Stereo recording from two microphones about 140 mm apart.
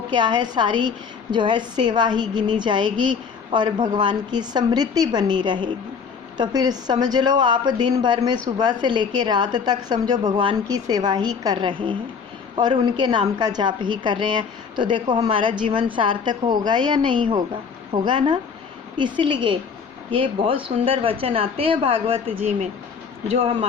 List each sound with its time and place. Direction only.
0.1 s a woman's voice: 30° right (ahead or behind)